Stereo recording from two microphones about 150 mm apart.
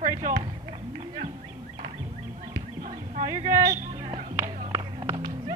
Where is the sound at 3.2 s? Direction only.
25° right (ahead or behind).